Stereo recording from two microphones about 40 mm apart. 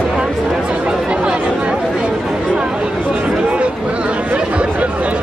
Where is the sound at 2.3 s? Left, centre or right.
Right.